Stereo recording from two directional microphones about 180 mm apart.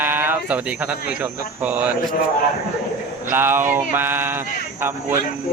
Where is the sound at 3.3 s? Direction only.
10° right (ahead or behind).